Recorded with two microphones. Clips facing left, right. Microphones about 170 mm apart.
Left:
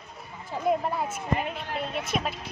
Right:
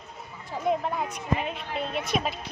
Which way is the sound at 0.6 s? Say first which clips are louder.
Left 1 dB; 5° left (ahead or behind).